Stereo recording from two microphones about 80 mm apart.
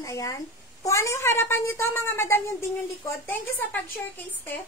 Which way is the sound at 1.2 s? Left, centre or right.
Left.